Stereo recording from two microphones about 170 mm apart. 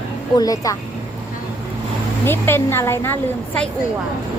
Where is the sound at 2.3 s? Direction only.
15° left (ahead or behind).